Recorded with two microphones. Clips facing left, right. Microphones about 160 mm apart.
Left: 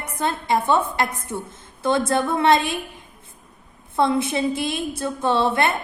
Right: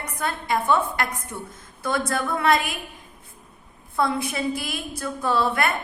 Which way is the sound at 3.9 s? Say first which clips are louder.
Left 4 dB; 25° left (ahead or behind).